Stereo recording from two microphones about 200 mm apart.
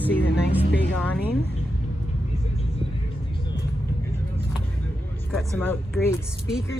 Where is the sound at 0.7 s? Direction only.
60° left (ahead or behind).